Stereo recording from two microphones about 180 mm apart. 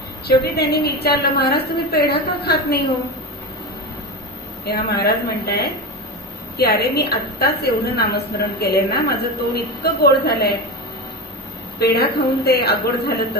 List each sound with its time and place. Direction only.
0.3 s a woman's voice: 60° left (ahead or behind)
4.6 s a woman's voice: 60° left (ahead or behind)
11.8 s a woman's voice: 60° left (ahead or behind)